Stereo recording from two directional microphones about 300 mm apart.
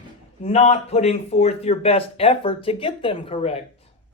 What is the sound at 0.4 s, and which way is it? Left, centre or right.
Speech, left.